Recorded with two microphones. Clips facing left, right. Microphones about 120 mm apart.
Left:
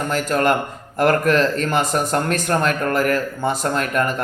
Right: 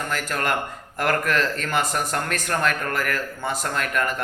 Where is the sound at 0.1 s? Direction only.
25° left (ahead or behind).